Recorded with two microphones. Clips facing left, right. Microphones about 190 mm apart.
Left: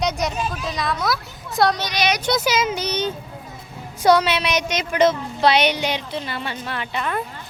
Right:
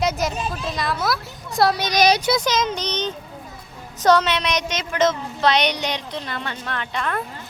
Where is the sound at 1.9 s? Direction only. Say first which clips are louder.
Right 5 dB; 40° right (ahead or behind).